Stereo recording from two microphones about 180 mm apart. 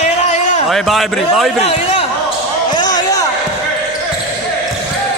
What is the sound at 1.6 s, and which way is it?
Speech, 35° left (ahead or behind).